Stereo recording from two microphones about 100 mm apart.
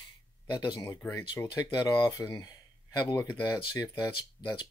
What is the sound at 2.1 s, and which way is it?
Speech, 35° left (ahead or behind).